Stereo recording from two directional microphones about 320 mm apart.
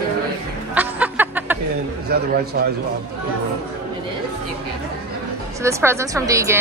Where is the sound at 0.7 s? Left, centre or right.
Centre.